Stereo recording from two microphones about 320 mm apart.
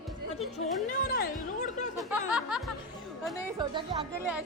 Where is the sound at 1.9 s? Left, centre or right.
Centre.